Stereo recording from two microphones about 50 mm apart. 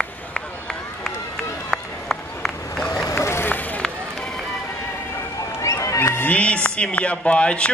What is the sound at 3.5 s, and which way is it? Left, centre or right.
Run, left.